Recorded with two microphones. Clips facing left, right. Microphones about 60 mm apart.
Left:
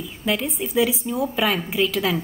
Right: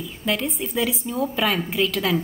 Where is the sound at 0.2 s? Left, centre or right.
Centre.